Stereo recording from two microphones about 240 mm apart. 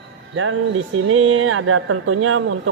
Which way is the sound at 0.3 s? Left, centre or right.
Right.